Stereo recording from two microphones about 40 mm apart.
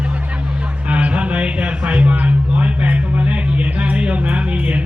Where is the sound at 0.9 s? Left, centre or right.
Right.